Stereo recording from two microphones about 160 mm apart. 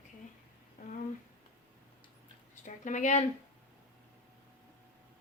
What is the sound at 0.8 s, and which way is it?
Speech, 55° left (ahead or behind).